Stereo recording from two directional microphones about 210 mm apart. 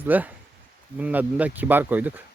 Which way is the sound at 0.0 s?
10° right (ahead or behind).